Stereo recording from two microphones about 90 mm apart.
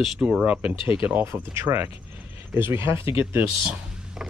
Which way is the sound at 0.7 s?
75° left (ahead or behind).